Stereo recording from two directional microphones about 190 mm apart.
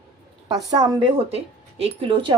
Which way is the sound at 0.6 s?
20° right (ahead or behind).